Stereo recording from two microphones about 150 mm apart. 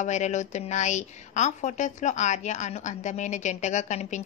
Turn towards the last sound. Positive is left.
turn(degrees=50)  # may be behind; listen again after turning